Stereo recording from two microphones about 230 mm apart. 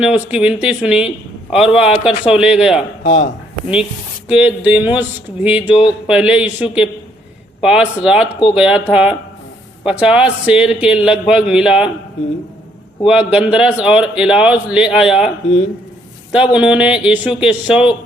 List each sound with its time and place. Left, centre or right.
0.0 s a man's voice: centre
3.0 s speech: left
4.3 s a man's voice: centre
13.1 s a man's voice: centre
16.3 s a man's voice: centre